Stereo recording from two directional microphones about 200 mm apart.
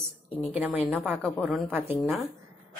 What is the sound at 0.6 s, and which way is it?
Speech, 10° right (ahead or behind).